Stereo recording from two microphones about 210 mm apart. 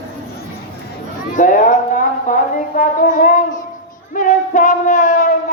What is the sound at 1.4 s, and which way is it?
Speech, 40° left (ahead or behind).